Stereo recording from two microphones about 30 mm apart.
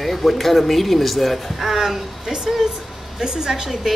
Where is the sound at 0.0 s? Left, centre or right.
Centre.